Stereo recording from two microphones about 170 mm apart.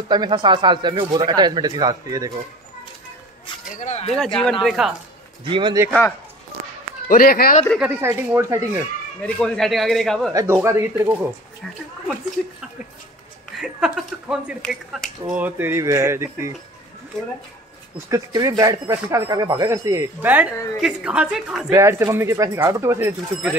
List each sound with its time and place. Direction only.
0.1 s speech: 25° right (ahead or behind)
3.7 s speech: 40° left (ahead or behind)
4.4 s a man's voice: centre (ahead or behind)
5.4 s speech: 25° right (ahead or behind)
7.1 s speech: 60° left (ahead or behind)
7.8 s speech: 15° right (ahead or behind)
9.2 s a man's voice: 5° left (ahead or behind)
10.3 s speech: 15° right (ahead or behind)
13.6 s a man's voice: centre (ahead or behind)
17.9 s a man's voice: 20° right (ahead or behind)
21.7 s speech: 15° right (ahead or behind)